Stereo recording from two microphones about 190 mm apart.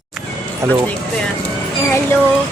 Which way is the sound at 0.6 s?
15° right (ahead or behind).